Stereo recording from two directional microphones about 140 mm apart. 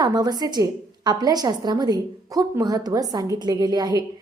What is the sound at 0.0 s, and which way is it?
A woman's voice, 30° right (ahead or behind).